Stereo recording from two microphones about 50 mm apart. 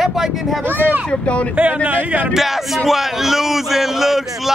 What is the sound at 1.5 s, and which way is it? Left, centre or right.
Speech, right.